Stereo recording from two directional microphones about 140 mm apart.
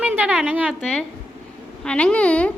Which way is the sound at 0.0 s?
10° right (ahead or behind).